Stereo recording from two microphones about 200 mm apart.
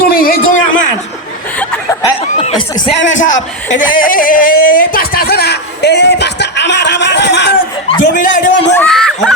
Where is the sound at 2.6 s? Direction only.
20° left (ahead or behind).